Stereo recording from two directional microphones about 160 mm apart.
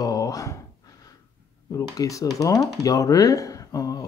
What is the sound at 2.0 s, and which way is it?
Speech, 20° left (ahead or behind).